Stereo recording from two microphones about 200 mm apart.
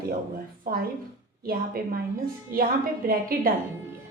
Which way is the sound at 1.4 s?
50° right (ahead or behind).